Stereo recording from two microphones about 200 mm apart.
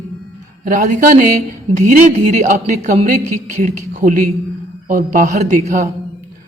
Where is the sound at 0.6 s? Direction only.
45° right (ahead or behind).